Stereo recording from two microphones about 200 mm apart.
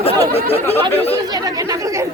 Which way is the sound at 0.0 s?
30° left (ahead or behind).